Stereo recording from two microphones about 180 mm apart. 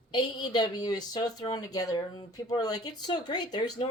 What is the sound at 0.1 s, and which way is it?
Speech, 25° left (ahead or behind).